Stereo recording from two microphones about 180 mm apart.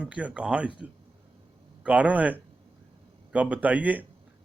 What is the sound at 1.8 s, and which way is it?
A man's voice, 5° right (ahead or behind).